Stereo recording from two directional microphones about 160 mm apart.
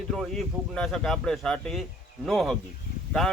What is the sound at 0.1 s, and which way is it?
A man's voice, centre (ahead or behind).